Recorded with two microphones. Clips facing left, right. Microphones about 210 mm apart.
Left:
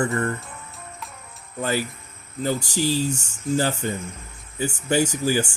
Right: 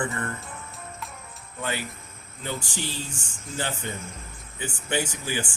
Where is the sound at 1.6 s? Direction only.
40° left (ahead or behind).